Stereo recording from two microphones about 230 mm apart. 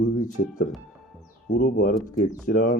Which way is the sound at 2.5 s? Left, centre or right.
Left.